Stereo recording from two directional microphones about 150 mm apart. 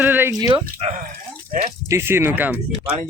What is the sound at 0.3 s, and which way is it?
Speech, 25° right (ahead or behind).